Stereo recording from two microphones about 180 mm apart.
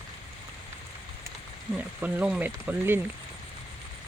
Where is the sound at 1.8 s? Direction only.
10° right (ahead or behind).